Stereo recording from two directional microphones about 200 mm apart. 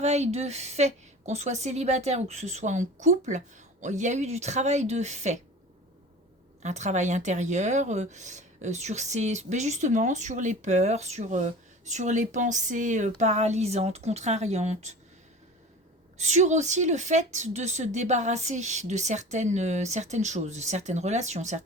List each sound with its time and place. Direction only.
0.0 s speech: 35° right (ahead or behind)
6.6 s speech: 35° right (ahead or behind)
16.1 s speech: 35° right (ahead or behind)